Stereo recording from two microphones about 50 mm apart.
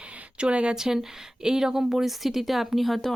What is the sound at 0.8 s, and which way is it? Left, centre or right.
A woman's voice, centre.